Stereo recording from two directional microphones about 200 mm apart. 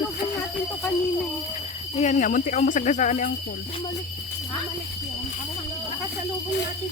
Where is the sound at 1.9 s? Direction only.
35° left (ahead or behind).